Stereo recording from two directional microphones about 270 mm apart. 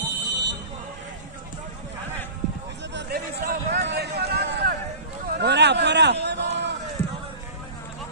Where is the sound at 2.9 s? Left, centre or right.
Right.